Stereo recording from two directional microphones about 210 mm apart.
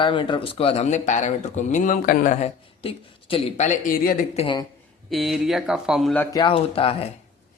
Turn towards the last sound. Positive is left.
turn(degrees=25)  # may be behind; listen again after turning